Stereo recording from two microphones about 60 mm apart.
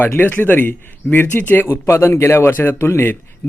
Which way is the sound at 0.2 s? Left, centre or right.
Left.